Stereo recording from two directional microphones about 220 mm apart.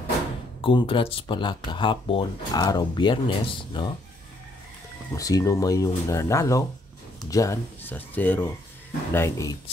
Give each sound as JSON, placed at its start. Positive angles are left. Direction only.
{"t": 0.6, "sound": "speech", "side_deg": 25}
{"t": 5.1, "sound": "speech", "side_deg": 15}